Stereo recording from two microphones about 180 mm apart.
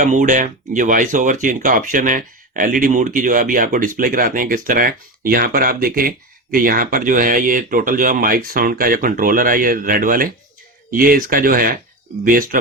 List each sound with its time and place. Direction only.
0.0 s speech: 45° right (ahead or behind)